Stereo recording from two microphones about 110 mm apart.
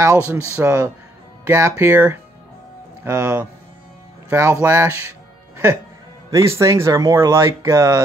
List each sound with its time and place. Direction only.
0.0 s speech: 25° right (ahead or behind)
6.3 s speech: 25° right (ahead or behind)